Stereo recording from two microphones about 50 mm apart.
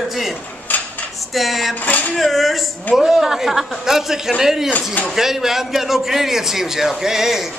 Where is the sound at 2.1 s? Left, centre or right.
Centre.